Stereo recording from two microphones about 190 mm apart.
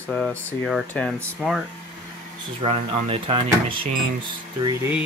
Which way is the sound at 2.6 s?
30° right (ahead or behind).